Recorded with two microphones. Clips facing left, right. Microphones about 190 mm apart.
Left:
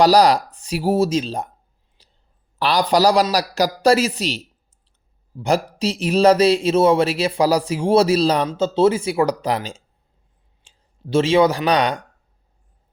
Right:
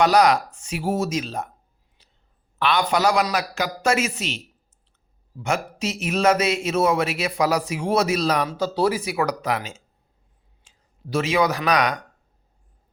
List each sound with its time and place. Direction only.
0.0 s a man's voice: 35° left (ahead or behind)
2.0 s whispering: 30° left (ahead or behind)
2.6 s a man's voice: 35° left (ahead or behind)